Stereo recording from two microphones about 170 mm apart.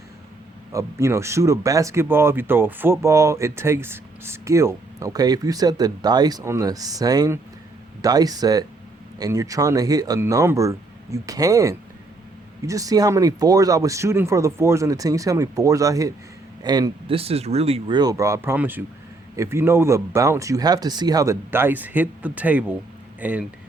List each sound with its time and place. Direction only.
0.7 s speech: 15° right (ahead or behind)